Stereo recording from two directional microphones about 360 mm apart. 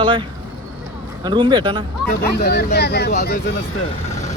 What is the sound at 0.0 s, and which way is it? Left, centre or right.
Speech, centre.